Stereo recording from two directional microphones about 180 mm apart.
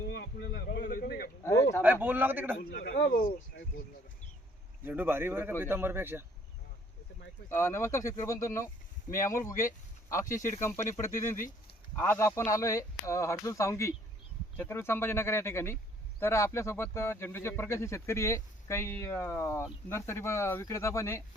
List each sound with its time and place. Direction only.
0.1 s a sound: 70° left (ahead or behind)
1.5 s a sound: 15° left (ahead or behind)
1.8 s a man's voice: 10° right (ahead or behind)
2.6 s speech: 65° left (ahead or behind)
4.9 s a man's voice: 10° right (ahead or behind)
7.5 s speech: 15° left (ahead or behind)